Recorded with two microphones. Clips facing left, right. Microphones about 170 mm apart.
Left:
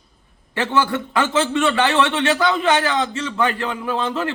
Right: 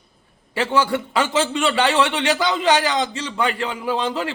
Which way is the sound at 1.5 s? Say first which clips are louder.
Left 2 dB; 15° right (ahead or behind).